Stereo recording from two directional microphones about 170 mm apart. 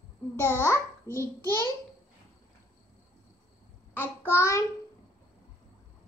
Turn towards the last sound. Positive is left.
turn(degrees=15)  # may be behind; listen again after turning